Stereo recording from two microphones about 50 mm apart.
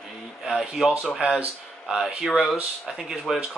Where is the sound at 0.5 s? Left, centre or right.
Centre.